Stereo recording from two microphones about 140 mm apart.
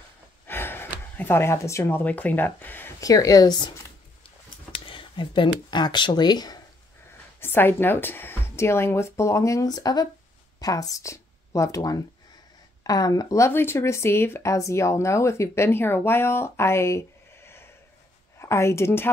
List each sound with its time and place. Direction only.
0.5 s speech: 15° left (ahead or behind)
3.0 s speech: 25° left (ahead or behind)
4.7 s speech: 35° left (ahead or behind)
7.3 s speech: 15° left (ahead or behind)